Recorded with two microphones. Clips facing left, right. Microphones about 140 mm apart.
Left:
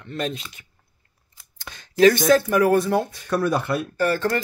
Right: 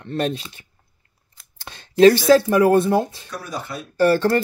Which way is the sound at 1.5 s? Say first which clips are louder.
Right 3 dB; 30° right (ahead or behind).